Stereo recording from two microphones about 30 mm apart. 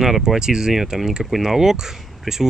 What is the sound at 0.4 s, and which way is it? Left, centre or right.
Speech, right.